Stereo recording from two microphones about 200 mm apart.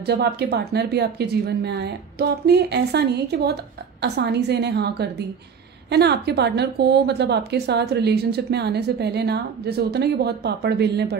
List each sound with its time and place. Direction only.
0.0 s a woman's voice: 55° right (ahead or behind)